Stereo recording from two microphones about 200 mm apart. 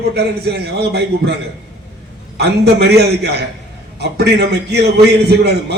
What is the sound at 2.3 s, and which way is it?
A man's voice, 55° right (ahead or behind).